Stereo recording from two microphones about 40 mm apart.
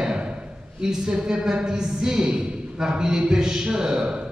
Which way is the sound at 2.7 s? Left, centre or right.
Centre.